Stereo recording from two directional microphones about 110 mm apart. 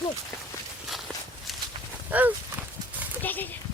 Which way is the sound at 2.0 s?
15° right (ahead or behind).